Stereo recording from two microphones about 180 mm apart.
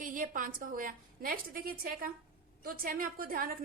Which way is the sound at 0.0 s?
50° right (ahead or behind).